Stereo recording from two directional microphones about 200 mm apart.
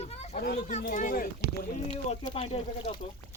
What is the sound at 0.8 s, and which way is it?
Speech, 40° left (ahead or behind).